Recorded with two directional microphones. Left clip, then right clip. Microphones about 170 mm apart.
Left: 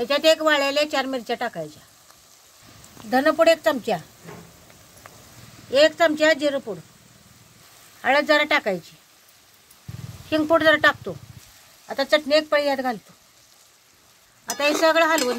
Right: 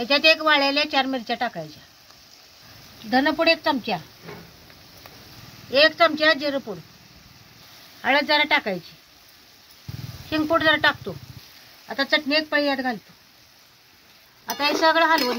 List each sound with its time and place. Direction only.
0.0 s speech: 45° left (ahead or behind)
3.1 s speech: 60° left (ahead or behind)
5.7 s speech: 45° left (ahead or behind)
8.0 s speech: 50° left (ahead or behind)
10.3 s speech: 45° left (ahead or behind)
14.4 s a sound: 40° left (ahead or behind)
14.8 s speech: 45° left (ahead or behind)